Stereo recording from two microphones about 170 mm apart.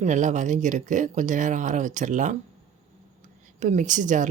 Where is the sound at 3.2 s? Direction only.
45° right (ahead or behind).